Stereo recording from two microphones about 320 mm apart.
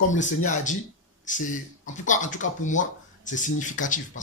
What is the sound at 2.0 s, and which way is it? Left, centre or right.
Speech, left.